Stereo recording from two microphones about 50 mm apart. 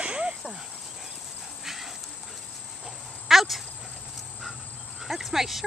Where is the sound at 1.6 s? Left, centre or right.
Centre.